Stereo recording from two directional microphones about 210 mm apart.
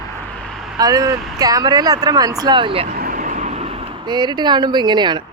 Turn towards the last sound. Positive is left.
turn(degrees=-20)  # may be behind; listen again after turning